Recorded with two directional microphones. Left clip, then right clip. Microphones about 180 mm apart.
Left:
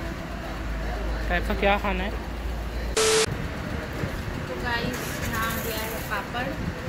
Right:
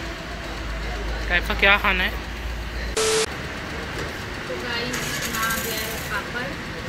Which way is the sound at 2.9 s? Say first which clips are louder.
Even; centre (ahead or behind).